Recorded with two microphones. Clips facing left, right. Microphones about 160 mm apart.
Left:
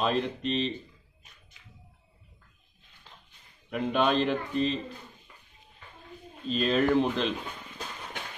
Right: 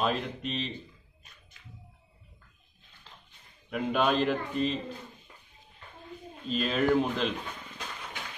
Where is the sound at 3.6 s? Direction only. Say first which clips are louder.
Left 1 dB; centre (ahead or behind).